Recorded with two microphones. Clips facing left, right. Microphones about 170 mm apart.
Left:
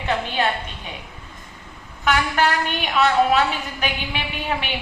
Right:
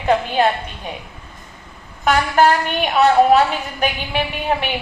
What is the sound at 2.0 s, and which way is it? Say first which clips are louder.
A woman's voice: right 5 dB; 40° right (ahead or behind).